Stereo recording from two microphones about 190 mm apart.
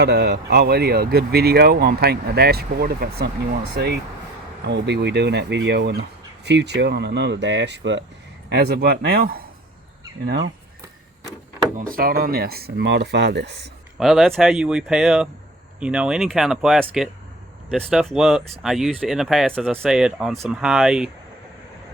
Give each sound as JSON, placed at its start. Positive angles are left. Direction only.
{"t": 0.0, "sound": "speech", "side_deg": -60}
{"t": 8.4, "sound": "speech", "side_deg": -55}
{"t": 11.8, "sound": "speech", "side_deg": -50}
{"t": 14.0, "sound": "speech", "side_deg": 0}
{"t": 17.9, "sound": "speech", "side_deg": 0}